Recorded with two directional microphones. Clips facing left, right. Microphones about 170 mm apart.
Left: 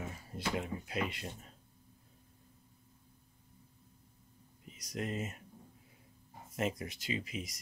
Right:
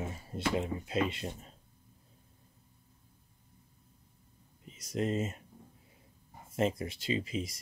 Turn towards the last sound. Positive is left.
turn(degrees=-30)  # may be behind; listen again after turning